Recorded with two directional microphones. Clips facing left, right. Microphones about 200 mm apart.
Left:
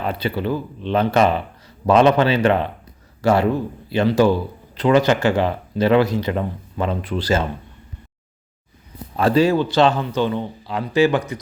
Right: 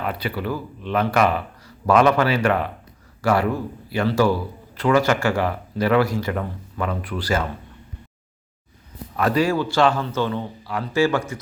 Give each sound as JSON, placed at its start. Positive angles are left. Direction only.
{"t": 0.0, "sound": "speech", "side_deg": 25}
{"t": 9.1, "sound": "speech", "side_deg": 25}